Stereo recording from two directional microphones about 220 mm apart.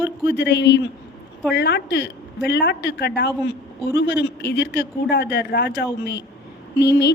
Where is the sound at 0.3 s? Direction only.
50° left (ahead or behind).